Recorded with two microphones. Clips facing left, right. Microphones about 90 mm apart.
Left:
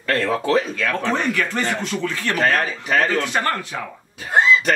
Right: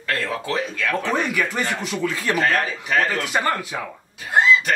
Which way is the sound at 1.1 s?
10° right (ahead or behind).